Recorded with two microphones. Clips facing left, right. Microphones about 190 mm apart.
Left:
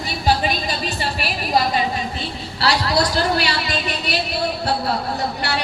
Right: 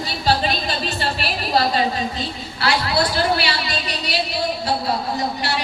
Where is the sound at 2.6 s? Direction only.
40° left (ahead or behind).